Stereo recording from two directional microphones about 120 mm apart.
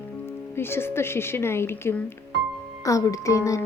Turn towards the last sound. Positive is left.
turn(degrees=25)  # may be behind; listen again after turning